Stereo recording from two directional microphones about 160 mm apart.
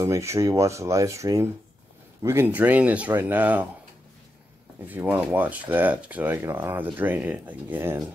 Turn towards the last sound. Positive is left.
turn(degrees=-15)  # may be behind; listen again after turning